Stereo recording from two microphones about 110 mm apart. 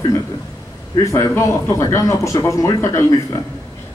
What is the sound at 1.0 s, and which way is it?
Speech, 25° left (ahead or behind).